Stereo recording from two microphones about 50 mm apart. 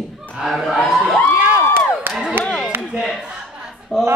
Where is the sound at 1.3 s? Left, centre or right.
Right.